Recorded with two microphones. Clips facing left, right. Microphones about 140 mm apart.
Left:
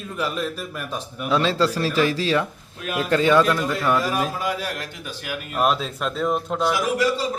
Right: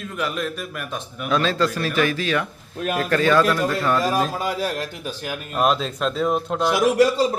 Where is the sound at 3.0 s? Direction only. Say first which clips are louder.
Left 1 dB; 15° left (ahead or behind).